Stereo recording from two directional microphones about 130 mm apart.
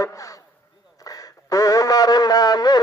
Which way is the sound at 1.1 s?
30° left (ahead or behind).